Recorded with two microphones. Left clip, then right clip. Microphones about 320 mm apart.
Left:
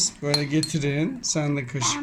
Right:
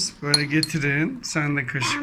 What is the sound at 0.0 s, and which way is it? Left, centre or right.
Speech, centre.